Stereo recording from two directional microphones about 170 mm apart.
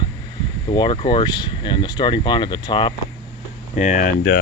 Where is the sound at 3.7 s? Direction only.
45° left (ahead or behind).